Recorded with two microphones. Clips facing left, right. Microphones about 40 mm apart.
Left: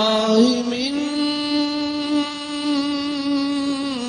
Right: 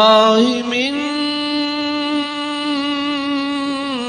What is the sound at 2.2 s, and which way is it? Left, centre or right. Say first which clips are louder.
Music: right 3 dB; right.